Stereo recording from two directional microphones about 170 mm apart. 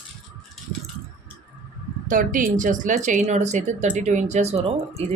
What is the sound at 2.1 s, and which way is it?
Speech, 50° right (ahead or behind).